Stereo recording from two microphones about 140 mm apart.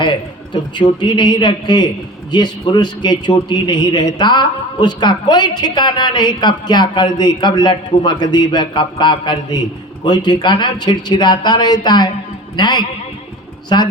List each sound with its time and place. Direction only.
0.0 s a woman's voice: 35° left (ahead or behind)